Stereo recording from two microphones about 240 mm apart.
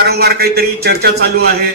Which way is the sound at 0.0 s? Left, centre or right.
Right.